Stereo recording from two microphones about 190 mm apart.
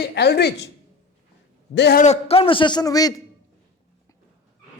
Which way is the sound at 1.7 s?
60° left (ahead or behind).